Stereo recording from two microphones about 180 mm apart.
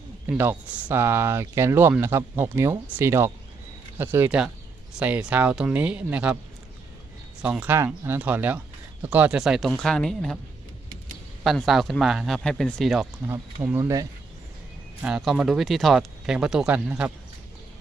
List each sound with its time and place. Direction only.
0.3 s speech: 10° right (ahead or behind)
7.4 s speech: 10° right (ahead or behind)
11.4 s speech: centre (ahead or behind)
13.2 s speech: 15° right (ahead or behind)
15.0 s speech: centre (ahead or behind)